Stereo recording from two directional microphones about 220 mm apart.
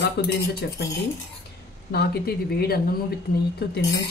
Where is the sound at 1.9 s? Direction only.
45° left (ahead or behind).